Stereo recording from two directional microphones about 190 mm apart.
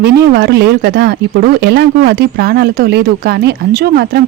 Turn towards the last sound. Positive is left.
turn(degrees=-55)  # may be behind; listen again after turning